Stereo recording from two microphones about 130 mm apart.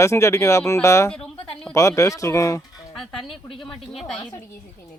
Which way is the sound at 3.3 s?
Centre (ahead or behind).